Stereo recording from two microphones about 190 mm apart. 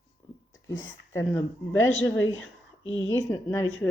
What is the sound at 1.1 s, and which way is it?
Speech, 15° left (ahead or behind).